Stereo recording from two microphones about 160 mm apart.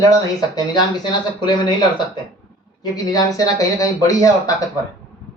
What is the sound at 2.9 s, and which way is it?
Speech, 25° left (ahead or behind).